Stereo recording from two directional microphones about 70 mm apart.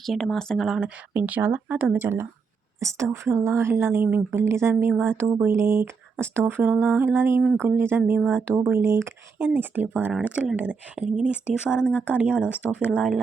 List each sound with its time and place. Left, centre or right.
0.0 s speech: centre
0.8 s speech: centre
1.6 s speech: right
2.0 s speech: right
4.3 s speech: right
9.4 s speech: right
10.2 s speech: centre